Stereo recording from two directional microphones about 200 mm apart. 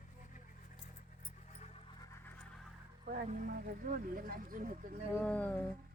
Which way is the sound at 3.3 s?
40° right (ahead or behind).